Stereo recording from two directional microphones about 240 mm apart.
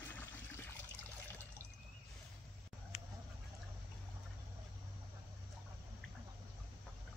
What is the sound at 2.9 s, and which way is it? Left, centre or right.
Duck, left.